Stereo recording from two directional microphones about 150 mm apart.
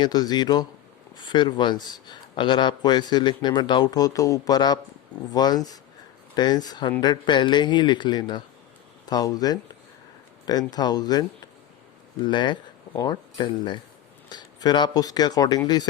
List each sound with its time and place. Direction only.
0.0 s speech: 25° left (ahead or behind)